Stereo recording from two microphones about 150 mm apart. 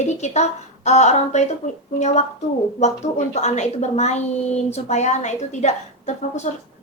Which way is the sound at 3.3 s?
50° left (ahead or behind).